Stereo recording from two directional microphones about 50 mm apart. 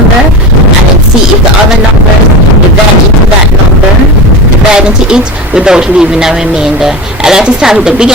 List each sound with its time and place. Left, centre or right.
4.7 s speech: centre